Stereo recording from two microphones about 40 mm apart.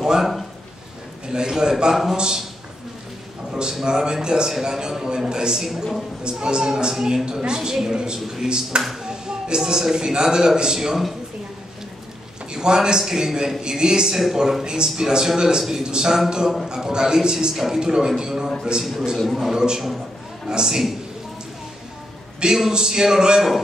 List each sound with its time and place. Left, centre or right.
0.2 s a sound: centre
1.3 s a man's voice: centre
3.8 s a man's voice: centre
9.0 s music: centre
9.7 s a man's voice: centre
12.4 s a man's voice: centre
19.1 s speech: centre
19.5 s a man's voice: centre
22.7 s a man's voice: centre